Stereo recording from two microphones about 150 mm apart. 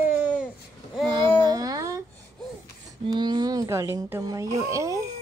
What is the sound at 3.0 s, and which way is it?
Speech, 30° right (ahead or behind).